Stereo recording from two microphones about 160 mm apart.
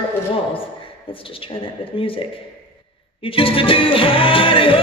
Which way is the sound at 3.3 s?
35° left (ahead or behind).